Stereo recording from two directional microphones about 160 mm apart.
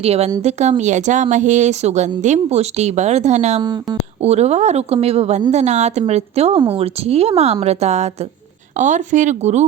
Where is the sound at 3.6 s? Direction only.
25° right (ahead or behind).